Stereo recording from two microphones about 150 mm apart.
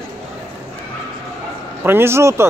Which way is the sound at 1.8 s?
15° right (ahead or behind).